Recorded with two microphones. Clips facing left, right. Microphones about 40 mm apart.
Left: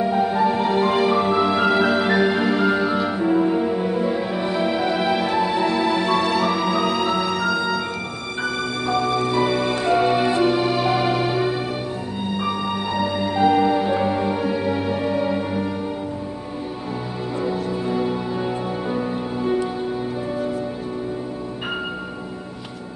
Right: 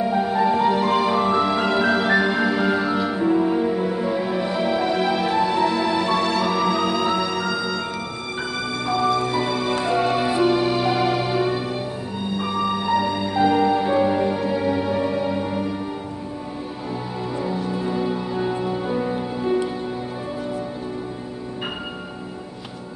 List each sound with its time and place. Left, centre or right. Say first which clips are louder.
0.0 s music: left 1 dB; centre
8.8 s music: right 1 dB; centre
17.6 s music: left 1 dB; centre